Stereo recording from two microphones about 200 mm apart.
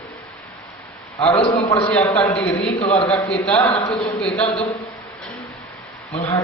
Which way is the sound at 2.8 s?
30° left (ahead or behind).